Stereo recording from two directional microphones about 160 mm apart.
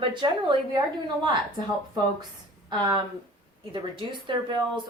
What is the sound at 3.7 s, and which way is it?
A woman's voice, 30° right (ahead or behind).